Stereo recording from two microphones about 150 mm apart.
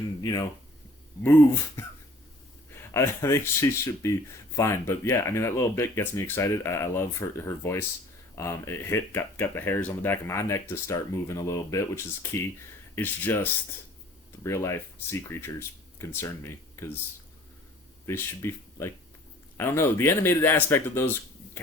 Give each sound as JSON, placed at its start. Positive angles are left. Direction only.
{"t": 0.2, "sound": "speech", "side_deg": 25}
{"t": 2.9, "sound": "speech", "side_deg": 20}
{"t": 18.0, "sound": "speech", "side_deg": 15}